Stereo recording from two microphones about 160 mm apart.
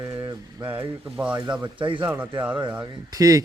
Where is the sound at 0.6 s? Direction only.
30° right (ahead or behind).